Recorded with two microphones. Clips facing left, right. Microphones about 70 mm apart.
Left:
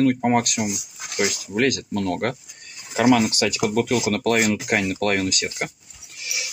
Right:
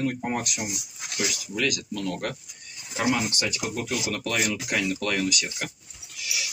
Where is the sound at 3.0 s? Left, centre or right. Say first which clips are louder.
Left 8 dB; left.